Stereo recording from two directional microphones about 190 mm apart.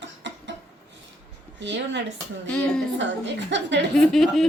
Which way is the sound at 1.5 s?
70° right (ahead or behind).